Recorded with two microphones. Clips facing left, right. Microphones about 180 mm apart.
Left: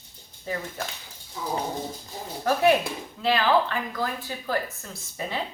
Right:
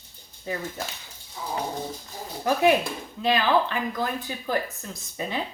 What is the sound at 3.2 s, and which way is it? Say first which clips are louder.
Speech: even; 20° right (ahead or behind).